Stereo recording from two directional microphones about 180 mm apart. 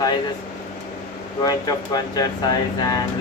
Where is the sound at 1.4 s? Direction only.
20° left (ahead or behind).